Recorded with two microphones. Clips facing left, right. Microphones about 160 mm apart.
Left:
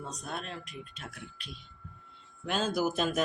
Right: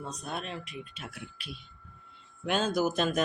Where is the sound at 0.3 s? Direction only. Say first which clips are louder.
Right 3 dB; centre (ahead or behind).